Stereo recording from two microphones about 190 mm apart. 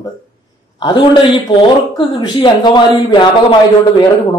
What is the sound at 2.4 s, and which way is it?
Speech, 25° left (ahead or behind).